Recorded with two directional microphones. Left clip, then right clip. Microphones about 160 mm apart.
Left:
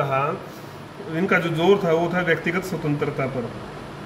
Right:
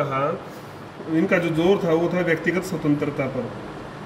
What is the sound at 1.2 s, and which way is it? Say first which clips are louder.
A man's voice: left 2 dB; 20° left (ahead or behind).